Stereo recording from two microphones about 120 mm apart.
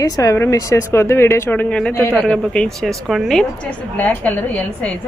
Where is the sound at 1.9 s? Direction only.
20° left (ahead or behind).